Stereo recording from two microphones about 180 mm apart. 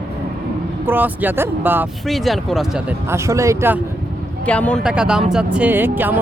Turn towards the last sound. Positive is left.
turn(degrees=-10)  # may be behind; listen again after turning